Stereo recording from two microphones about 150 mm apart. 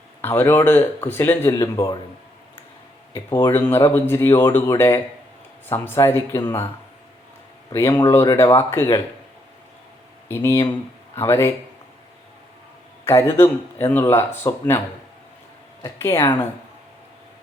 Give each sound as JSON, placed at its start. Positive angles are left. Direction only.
{"t": 0.2, "sound": "a man's voice", "side_deg": 15}
{"t": 3.1, "sound": "a man's voice", "side_deg": 20}
{"t": 7.7, "sound": "speech", "side_deg": 15}
{"t": 10.2, "sound": "speech", "side_deg": 15}
{"t": 13.3, "sound": "speech", "side_deg": 15}
{"t": 16.0, "sound": "speech", "side_deg": 15}